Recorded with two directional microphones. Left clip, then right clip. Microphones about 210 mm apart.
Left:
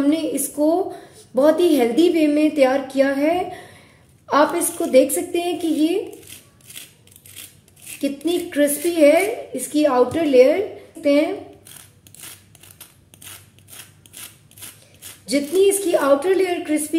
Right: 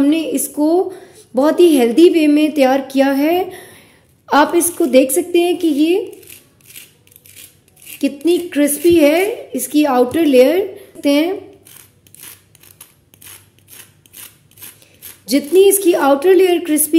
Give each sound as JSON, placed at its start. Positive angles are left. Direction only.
{"t": 0.0, "sound": "a woman's voice", "side_deg": -25}
{"t": 8.0, "sound": "a woman's voice", "side_deg": -25}
{"t": 12.7, "sound": "mechanisms", "side_deg": 0}
{"t": 15.2, "sound": "a woman's voice", "side_deg": -30}